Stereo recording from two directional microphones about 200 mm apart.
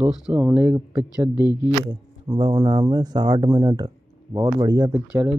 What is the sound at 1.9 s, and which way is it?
Speech, 20° right (ahead or behind).